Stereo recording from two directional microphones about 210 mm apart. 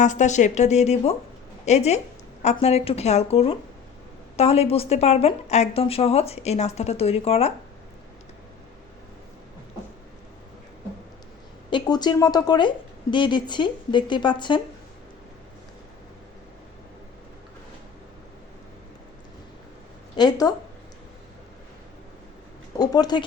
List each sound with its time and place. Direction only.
0.0 s a woman's voice: 35° left (ahead or behind)
11.7 s a woman's voice: 20° left (ahead or behind)
20.1 s a woman's voice: 20° left (ahead or behind)
22.8 s a woman's voice: 20° left (ahead or behind)